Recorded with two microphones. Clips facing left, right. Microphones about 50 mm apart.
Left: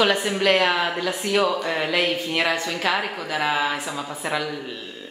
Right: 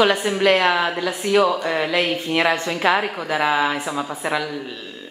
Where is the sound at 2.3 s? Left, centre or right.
Centre.